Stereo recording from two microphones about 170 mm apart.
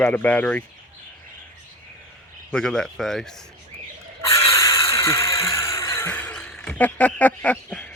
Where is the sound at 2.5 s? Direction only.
5° left (ahead or behind).